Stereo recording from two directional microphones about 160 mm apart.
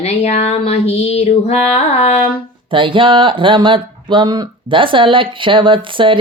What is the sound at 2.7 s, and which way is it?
Speech, 30° right (ahead or behind).